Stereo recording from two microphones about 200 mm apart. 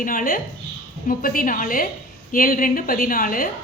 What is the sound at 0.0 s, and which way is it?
A woman's voice, 45° left (ahead or behind).